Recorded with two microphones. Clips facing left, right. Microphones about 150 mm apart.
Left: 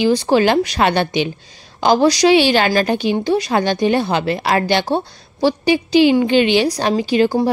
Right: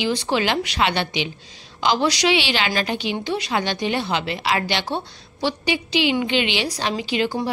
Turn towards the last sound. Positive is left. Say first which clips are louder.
# left 8 dB
turn(degrees=45)  # may be behind; listen again after turning